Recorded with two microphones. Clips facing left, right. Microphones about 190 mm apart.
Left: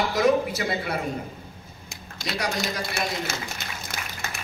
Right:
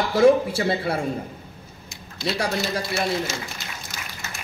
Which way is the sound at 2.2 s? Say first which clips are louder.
Right 3 dB; 30° right (ahead or behind).